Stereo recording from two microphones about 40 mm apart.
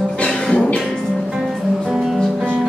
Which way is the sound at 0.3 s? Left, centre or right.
Centre.